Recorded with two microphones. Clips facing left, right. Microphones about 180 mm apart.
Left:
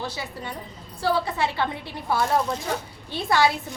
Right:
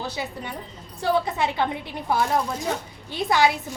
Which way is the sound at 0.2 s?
20° right (ahead or behind).